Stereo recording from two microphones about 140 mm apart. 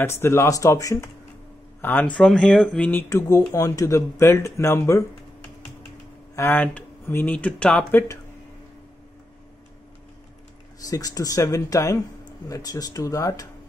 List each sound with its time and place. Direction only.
0.0 s speech: 20° left (ahead or behind)
6.3 s speech: 15° left (ahead or behind)
10.8 s speech: 25° left (ahead or behind)